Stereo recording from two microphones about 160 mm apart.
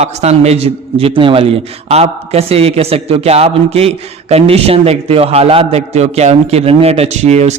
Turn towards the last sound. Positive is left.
turn(degrees=-45)  # may be behind; listen again after turning